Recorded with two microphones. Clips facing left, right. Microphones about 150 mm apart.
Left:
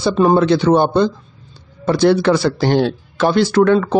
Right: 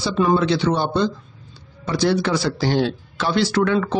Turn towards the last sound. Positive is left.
turn(degrees=50)  # may be behind; listen again after turning